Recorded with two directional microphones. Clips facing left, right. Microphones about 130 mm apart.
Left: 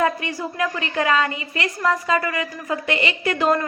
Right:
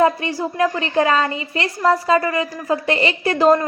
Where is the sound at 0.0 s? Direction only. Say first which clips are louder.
Right 5 dB; 30° right (ahead or behind).